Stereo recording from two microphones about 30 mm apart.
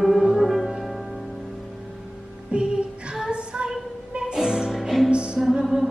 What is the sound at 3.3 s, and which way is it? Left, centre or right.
Female singing, right.